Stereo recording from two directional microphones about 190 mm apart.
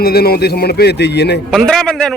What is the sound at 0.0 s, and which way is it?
A man's voice, 55° left (ahead or behind).